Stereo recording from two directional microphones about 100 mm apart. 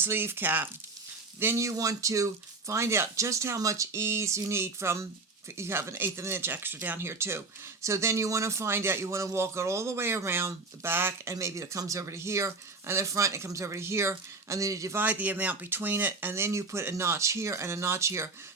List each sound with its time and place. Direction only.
0.0 s speech: 20° right (ahead or behind)
15.0 s speech: 15° right (ahead or behind)